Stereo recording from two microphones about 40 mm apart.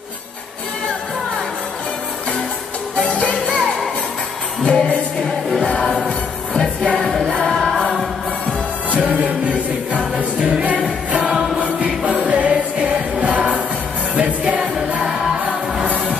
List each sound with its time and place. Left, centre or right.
3.0 s music: left
4.6 s music: left
7.0 s music: centre
8.9 s music: right
11.1 s music: centre
11.8 s music: right